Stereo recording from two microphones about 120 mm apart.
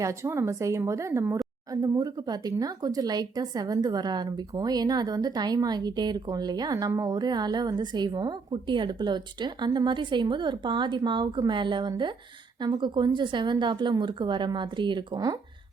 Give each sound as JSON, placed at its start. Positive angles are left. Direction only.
{"t": 0.0, "sound": "speech", "side_deg": -25}